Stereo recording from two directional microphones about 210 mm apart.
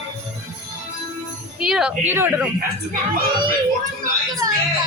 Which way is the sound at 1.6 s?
5° right (ahead or behind).